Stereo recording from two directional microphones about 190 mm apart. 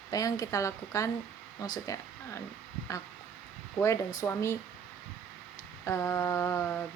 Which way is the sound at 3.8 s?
15° left (ahead or behind).